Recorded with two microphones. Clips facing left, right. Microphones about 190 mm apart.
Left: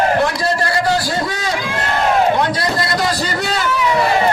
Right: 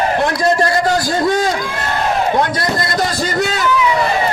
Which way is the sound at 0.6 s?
45° right (ahead or behind).